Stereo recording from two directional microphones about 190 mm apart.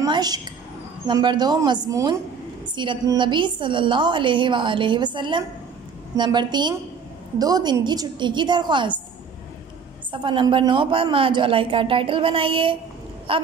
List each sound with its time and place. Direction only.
0.0 s a sound: 20° right (ahead or behind)
1.0 s a woman's voice: 25° right (ahead or behind)
10.1 s a woman's voice: 25° right (ahead or behind)